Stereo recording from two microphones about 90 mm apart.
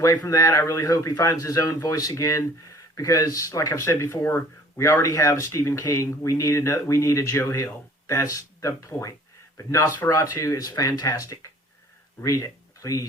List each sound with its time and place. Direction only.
0.0 s speech: 35° left (ahead or behind)